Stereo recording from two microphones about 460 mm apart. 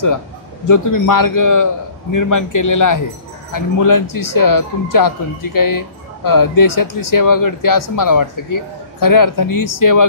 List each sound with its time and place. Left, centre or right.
0.7 s a man's voice: left